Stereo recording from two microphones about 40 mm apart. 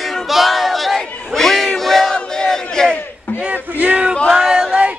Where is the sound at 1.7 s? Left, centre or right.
Centre.